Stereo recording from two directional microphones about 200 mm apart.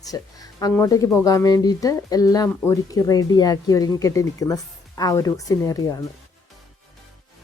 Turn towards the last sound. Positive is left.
turn(degrees=15)  # may be behind; listen again after turning